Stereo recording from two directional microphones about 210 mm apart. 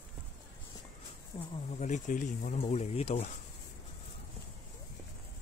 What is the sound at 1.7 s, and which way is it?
Speech, 35° left (ahead or behind).